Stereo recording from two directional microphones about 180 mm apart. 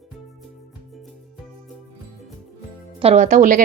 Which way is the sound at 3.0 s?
35° right (ahead or behind).